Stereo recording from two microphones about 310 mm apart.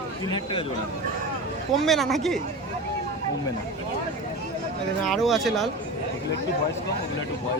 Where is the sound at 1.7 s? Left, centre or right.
Centre.